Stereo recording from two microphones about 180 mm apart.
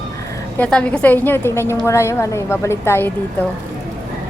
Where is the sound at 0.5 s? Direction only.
5° left (ahead or behind).